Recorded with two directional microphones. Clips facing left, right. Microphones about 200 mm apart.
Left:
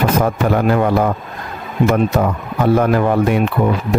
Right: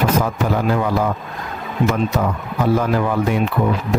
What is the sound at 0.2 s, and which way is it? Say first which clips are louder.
Speech: left 4 dB; 60° left (ahead or behind).